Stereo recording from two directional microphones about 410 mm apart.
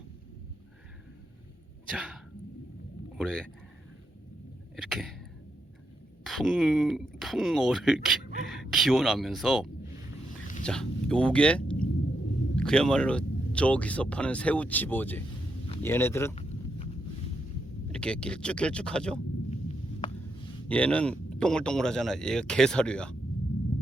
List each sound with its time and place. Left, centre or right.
1.9 s speech: centre
3.2 s speech: centre
4.8 s speech: centre
6.2 s speech: centre
15.6 s a sound: centre
17.9 s speech: centre
19.5 s a sound: centre
20.7 s speech: centre